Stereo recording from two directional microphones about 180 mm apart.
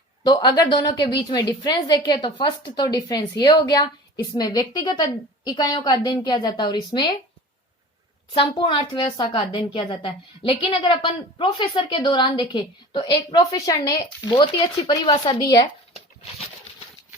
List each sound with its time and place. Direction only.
0.3 s a woman's voice: 25° left (ahead or behind)
8.3 s a woman's voice: 30° left (ahead or behind)